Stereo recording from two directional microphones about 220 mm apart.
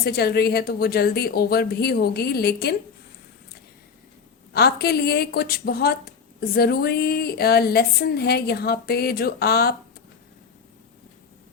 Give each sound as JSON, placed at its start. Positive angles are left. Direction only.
{"t": 0.0, "sound": "a woman's voice", "side_deg": 45}
{"t": 4.5, "sound": "a woman's voice", "side_deg": 45}